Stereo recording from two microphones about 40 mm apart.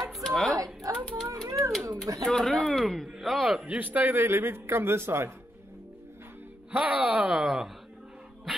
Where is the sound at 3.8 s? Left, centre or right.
Right.